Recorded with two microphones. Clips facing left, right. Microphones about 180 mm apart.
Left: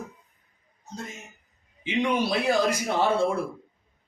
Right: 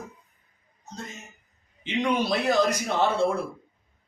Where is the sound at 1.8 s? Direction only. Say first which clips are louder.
Even; 10° left (ahead or behind).